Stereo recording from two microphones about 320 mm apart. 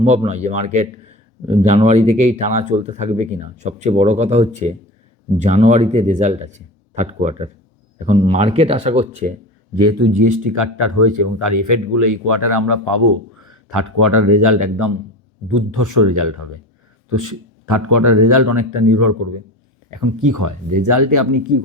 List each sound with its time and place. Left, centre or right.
0.0 s speech: centre
9.8 s speech: right